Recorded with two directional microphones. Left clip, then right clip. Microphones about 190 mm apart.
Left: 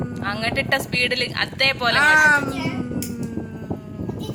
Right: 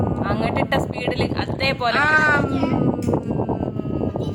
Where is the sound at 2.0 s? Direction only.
40° right (ahead or behind).